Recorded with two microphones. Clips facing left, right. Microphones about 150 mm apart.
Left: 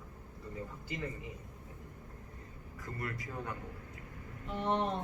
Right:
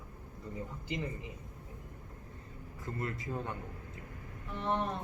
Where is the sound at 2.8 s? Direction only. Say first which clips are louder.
Right 2 dB; 25° right (ahead or behind).